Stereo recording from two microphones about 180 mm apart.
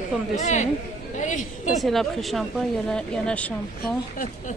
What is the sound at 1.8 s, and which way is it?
A woman's voice, centre (ahead or behind).